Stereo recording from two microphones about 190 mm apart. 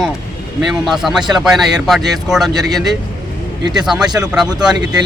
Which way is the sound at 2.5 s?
20° right (ahead or behind).